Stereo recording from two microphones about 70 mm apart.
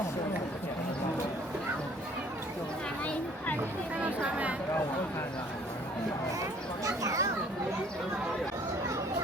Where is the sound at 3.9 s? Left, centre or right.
Centre.